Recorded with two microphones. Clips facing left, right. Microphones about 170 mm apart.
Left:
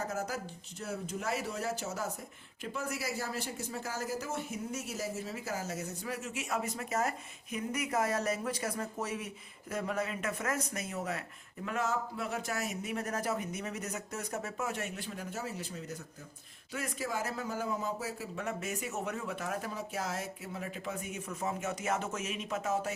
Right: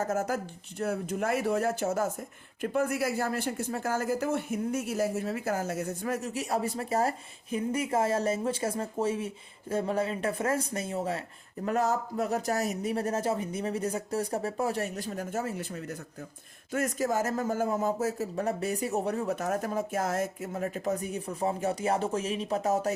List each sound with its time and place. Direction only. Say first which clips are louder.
0.0 s speech: right 7 dB; 50° right (ahead or behind)
16.7 s speech: right 8 dB; 45° right (ahead or behind)